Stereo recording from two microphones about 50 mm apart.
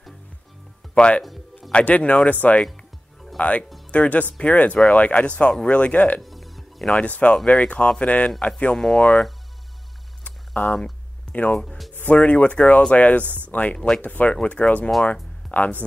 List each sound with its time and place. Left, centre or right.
0.9 s speech: left
6.2 s music: centre
7.0 s speech: left
8.7 s speech: centre
10.2 s a sound: left
11.9 s speech: left
13.2 s speech: right
13.5 s speech: left
13.7 s speech: centre
14.0 s speech: left